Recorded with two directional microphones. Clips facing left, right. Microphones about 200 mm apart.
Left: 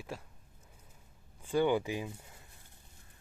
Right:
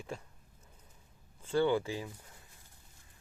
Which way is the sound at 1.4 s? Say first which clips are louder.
Even; 15° left (ahead or behind).